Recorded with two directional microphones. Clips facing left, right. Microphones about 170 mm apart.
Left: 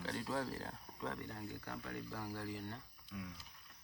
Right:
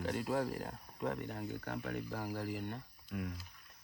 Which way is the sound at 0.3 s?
45° right (ahead or behind).